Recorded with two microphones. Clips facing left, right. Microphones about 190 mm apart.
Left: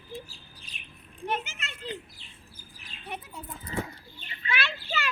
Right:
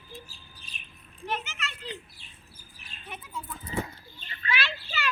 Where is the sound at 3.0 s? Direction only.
65° left (ahead or behind).